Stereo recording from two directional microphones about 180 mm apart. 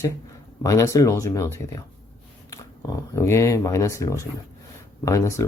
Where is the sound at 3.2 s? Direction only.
15° left (ahead or behind).